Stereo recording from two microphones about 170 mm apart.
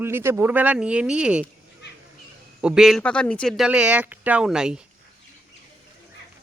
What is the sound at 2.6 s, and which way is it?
Speech, 5° right (ahead or behind).